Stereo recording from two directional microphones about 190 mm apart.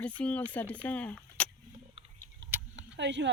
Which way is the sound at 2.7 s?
65° right (ahead or behind).